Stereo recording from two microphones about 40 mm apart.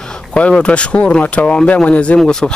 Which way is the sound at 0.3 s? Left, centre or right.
Left.